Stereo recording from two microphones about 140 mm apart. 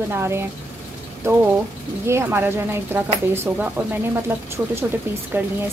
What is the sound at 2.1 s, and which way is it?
Speech, 15° right (ahead or behind).